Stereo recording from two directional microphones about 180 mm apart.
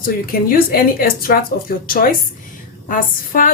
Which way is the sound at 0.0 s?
50° left (ahead or behind).